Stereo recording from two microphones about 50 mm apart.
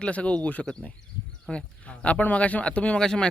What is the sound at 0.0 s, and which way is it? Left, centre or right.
Speech, left.